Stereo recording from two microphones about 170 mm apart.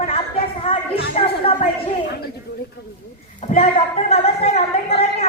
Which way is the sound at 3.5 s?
35° left (ahead or behind).